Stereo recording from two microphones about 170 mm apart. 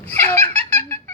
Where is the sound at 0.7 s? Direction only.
10° left (ahead or behind).